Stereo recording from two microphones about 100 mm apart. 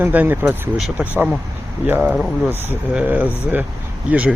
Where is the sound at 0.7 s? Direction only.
5° right (ahead or behind).